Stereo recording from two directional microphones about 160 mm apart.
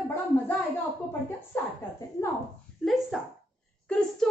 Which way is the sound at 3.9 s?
5° left (ahead or behind).